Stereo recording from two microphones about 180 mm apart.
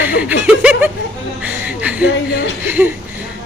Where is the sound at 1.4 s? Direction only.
5° right (ahead or behind).